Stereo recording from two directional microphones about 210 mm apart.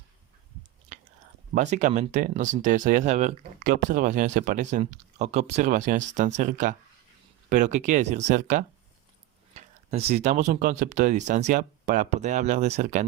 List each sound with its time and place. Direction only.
1.5 s speech: 35° right (ahead or behind)